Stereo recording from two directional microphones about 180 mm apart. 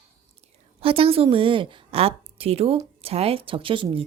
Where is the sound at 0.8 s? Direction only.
30° right (ahead or behind).